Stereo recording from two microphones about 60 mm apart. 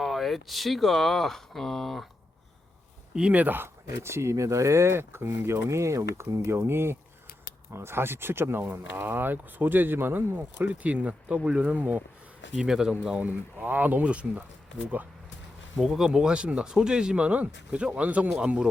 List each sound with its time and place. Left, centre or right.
0.0 s speech: centre
3.3 s speech: right
12.6 s speech: centre
13.6 s speech: right
15.8 s speech: centre; by 18.3 s right